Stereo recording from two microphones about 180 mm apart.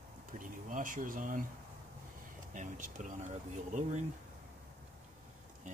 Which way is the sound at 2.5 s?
45° right (ahead or behind).